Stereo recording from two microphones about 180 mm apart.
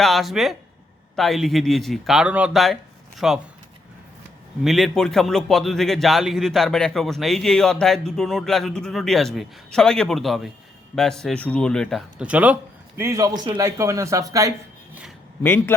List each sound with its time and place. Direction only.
0.0 s a man's voice: centre (ahead or behind)
4.6 s a man's voice: centre (ahead or behind); by 14.5 s 20° right (ahead or behind)
15.4 s a man's voice: 10° left (ahead or behind)